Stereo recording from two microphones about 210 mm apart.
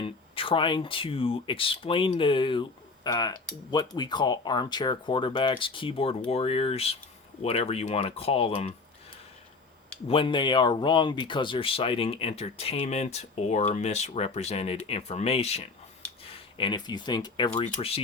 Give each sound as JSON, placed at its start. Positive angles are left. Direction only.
{"t": 0.0, "sound": "speech", "side_deg": 25}
{"t": 10.1, "sound": "speech", "side_deg": 25}